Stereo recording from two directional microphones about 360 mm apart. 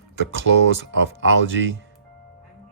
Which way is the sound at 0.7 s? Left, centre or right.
Right.